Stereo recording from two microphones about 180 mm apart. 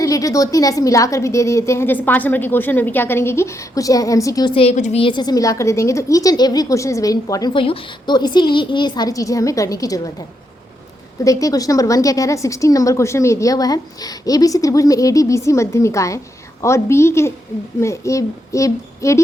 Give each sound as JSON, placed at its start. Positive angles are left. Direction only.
{"t": 0.0, "sound": "a woman's voice", "side_deg": 20}
{"t": 11.2, "sound": "a woman's voice", "side_deg": 20}